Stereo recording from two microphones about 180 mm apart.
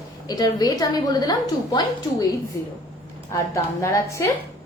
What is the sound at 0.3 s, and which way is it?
A woman's voice, 20° left (ahead or behind).